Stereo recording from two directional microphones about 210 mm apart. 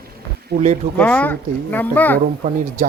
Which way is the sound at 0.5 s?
50° right (ahead or behind).